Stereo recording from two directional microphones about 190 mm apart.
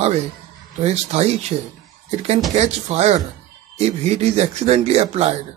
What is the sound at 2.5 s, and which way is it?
Speech, 35° right (ahead or behind).